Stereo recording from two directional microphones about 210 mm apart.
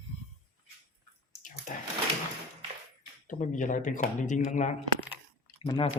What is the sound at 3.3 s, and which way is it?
Speech, 35° left (ahead or behind).